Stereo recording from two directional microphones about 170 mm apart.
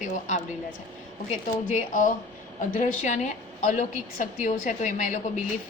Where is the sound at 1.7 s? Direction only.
50° left (ahead or behind).